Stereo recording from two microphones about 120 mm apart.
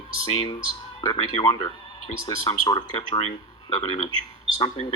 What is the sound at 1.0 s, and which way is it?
Speech, 40° left (ahead or behind).